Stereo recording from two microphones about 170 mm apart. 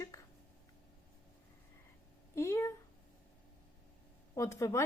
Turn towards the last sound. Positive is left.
turn(degrees=15)  # may be behind; listen again after turning